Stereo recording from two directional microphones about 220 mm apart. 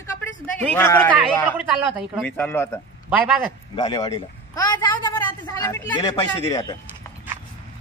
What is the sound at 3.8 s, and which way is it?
A woman's voice, 25° left (ahead or behind).